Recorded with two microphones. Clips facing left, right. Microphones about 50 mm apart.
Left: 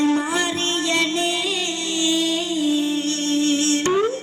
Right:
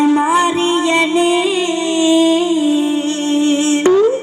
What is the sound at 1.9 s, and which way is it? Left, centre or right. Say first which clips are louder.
Humming: right 10 dB; right.